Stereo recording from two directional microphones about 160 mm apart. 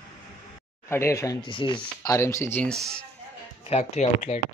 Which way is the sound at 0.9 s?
15° left (ahead or behind).